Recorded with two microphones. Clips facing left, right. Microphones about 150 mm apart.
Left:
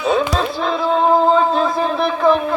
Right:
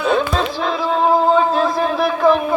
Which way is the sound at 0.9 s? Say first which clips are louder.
Left 1 dB; 5° right (ahead or behind).